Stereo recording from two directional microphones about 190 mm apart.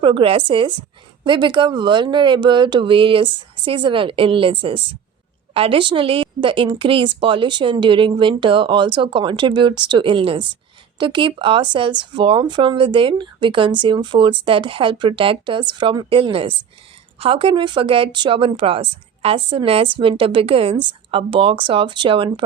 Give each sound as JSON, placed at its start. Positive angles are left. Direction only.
{"t": 0.0, "sound": "speech", "side_deg": -25}